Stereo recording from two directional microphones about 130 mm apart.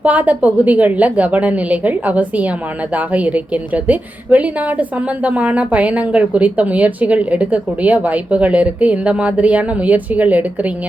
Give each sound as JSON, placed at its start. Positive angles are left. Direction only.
{"t": 0.0, "sound": "a woman's voice", "side_deg": -10}